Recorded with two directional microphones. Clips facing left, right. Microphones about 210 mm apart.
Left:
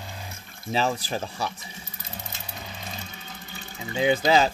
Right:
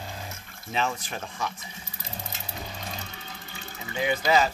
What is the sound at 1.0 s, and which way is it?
Speech, 35° left (ahead or behind).